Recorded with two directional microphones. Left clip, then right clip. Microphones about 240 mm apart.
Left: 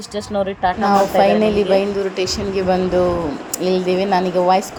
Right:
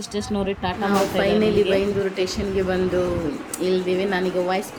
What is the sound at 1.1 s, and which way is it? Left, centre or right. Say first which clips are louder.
A child's voice: left 6 dB; centre.